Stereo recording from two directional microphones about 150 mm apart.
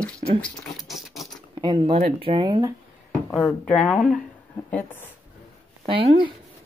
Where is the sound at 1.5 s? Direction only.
35° right (ahead or behind).